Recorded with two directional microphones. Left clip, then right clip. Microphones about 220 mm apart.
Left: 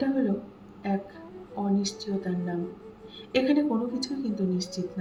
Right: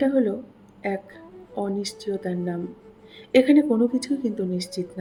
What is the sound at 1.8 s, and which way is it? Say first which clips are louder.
A woman's voice: right 4 dB; 35° right (ahead or behind).